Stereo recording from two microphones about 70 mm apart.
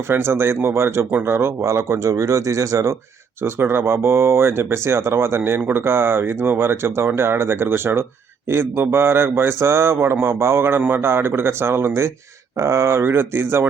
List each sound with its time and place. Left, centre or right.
0.1 s speech: right
3.4 s speech: right